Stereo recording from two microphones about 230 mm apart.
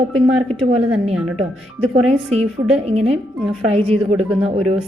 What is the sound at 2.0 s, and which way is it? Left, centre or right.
A woman's voice, right.